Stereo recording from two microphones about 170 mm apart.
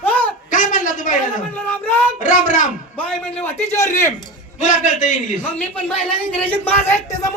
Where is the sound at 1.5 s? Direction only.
10° left (ahead or behind).